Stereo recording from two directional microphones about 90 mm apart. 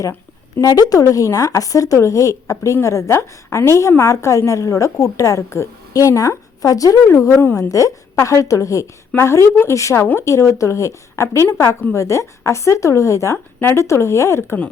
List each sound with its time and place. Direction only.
0.6 s a woman's voice: 40° left (ahead or behind)